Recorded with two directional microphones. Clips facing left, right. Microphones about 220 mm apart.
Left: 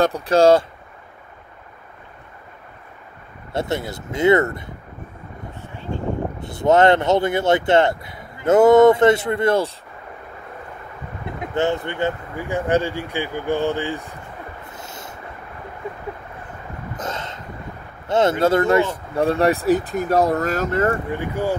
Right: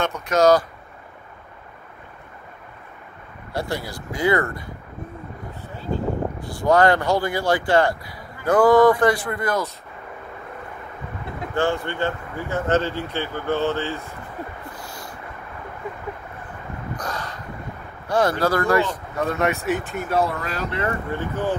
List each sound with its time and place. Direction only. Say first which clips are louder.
0.0 s speech: left 3 dB; 30° left (ahead or behind)
3.5 s speech: left 3 dB; 25° left (ahead or behind)
6.4 s speech: left 3 dB; 20° left (ahead or behind)
11.5 s speech: left 1 dB; 20° left (ahead or behind)
14.6 s a sound: even; 20° left (ahead or behind)
16.9 s a sound: left 2 dB; 25° left (ahead or behind)
18.0 s speech: left 3 dB; 25° left (ahead or behind); by 21.0 s 45° left (ahead or behind)
21.1 s speech: left 2 dB; 10° left (ahead or behind)